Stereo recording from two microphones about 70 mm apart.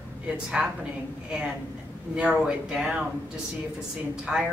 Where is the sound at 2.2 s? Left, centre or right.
Centre.